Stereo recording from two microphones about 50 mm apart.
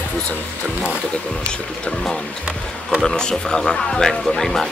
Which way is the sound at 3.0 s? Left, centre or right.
Centre.